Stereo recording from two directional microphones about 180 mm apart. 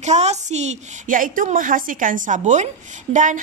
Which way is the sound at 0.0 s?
40° right (ahead or behind).